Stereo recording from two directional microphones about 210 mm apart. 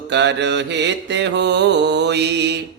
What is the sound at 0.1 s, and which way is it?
Music, 55° right (ahead or behind).